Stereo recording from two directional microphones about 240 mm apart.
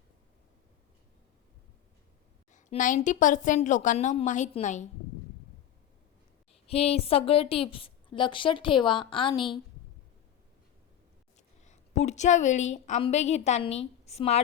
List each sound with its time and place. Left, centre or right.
2.5 s a woman's voice: left
6.5 s a woman's voice: left
11.6 s a woman's voice: left